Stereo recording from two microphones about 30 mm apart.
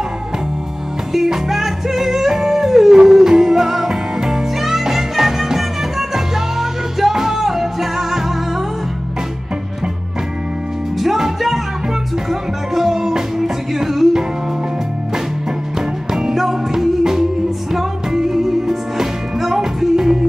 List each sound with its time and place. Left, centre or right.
1.1 s music: centre
11.0 s music: centre
16.1 s music: centre